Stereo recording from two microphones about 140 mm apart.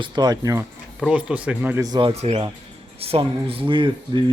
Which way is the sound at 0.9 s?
5° right (ahead or behind).